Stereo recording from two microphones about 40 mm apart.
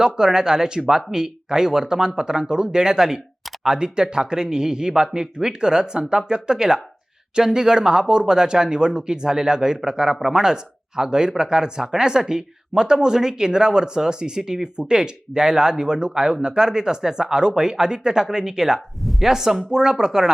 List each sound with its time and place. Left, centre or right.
0.0 s speech: centre